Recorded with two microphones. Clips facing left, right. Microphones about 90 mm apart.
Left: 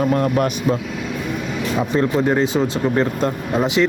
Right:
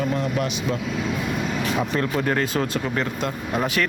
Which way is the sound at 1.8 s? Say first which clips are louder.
Left 8 dB; 25° left (ahead or behind).